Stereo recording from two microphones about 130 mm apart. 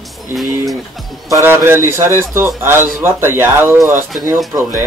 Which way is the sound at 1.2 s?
25° right (ahead or behind).